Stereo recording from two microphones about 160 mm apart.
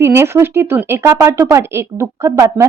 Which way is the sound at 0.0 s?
15° right (ahead or behind).